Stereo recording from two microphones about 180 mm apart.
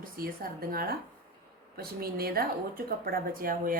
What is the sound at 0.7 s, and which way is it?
A woman's voice, 55° right (ahead or behind).